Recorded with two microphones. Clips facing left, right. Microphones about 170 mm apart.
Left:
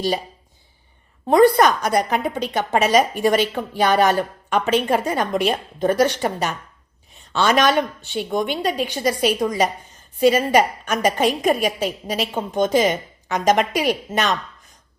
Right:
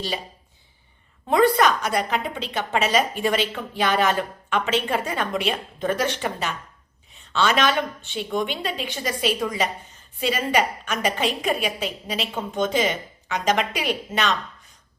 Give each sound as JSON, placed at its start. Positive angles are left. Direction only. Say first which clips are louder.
{"t": 1.3, "sound": "a woman's voice", "louder": "left 4 dB", "side_deg": 40}